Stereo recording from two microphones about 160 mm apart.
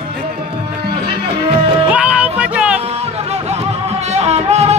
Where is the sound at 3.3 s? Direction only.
40° right (ahead or behind).